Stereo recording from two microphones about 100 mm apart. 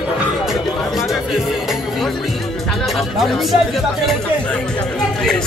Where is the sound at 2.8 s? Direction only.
Centre (ahead or behind).